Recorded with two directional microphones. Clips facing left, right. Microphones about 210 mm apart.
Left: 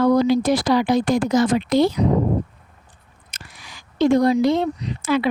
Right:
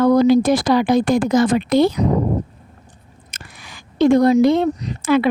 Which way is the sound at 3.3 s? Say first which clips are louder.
Right 2 dB; 50° right (ahead or behind).